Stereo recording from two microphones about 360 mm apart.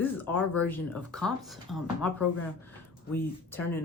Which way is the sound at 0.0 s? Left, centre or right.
Centre.